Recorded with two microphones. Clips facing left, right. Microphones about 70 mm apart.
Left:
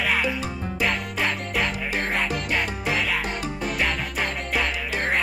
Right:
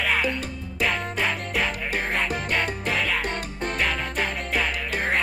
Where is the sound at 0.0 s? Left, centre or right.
Centre.